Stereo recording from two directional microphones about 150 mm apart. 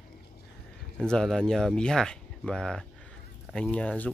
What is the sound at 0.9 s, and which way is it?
Speech, 5° left (ahead or behind).